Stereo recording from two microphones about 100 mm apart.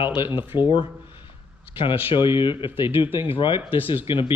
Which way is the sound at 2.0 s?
55° left (ahead or behind).